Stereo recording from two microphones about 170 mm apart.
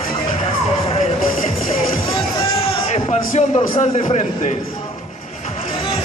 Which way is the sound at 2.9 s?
40° left (ahead or behind).